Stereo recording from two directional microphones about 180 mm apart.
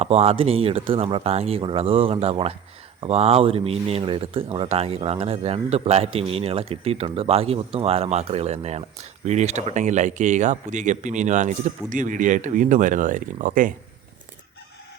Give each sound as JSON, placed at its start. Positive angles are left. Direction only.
{"t": 0.0, "sound": "speech", "side_deg": -35}